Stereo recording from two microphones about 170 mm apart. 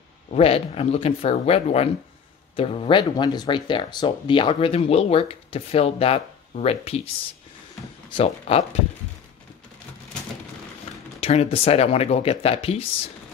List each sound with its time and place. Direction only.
0.3 s speech: 35° left (ahead or behind)
8.1 s speech: 35° left (ahead or behind)
11.1 s speech: 35° left (ahead or behind)